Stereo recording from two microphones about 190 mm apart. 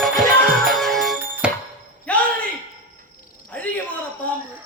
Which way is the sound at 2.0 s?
5° left (ahead or behind).